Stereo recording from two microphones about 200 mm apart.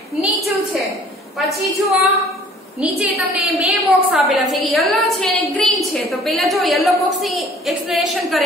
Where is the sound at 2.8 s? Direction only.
5° right (ahead or behind).